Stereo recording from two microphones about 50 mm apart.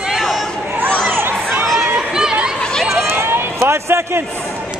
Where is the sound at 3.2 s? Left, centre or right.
Right.